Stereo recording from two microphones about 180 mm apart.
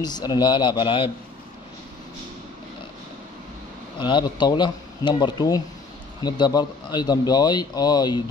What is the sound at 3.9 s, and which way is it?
A man's voice, 25° left (ahead or behind).